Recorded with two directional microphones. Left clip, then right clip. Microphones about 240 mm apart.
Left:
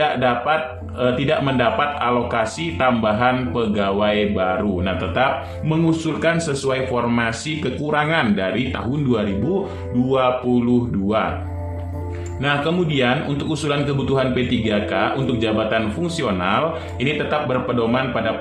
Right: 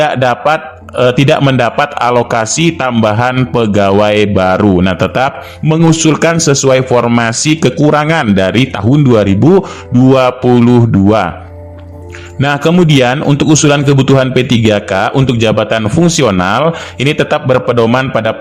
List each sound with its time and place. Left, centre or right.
0.0 s a man's voice: right
12.4 s a man's voice: right